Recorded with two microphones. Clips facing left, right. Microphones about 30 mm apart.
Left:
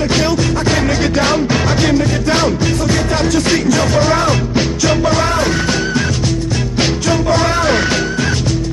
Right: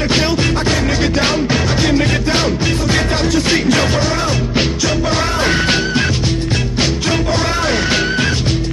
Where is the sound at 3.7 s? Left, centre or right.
Right.